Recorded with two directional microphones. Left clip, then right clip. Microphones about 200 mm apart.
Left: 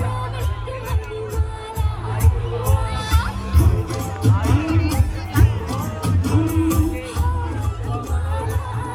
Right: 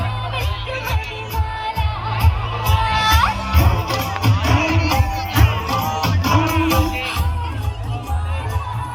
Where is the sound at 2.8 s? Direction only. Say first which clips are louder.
Right 11 dB; 20° right (ahead or behind).